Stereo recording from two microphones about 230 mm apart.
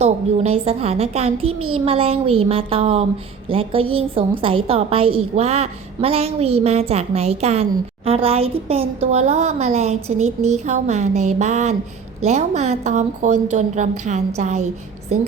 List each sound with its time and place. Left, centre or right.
0.0 s a woman's voice: right